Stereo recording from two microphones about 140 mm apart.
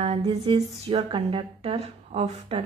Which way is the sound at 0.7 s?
45° right (ahead or behind).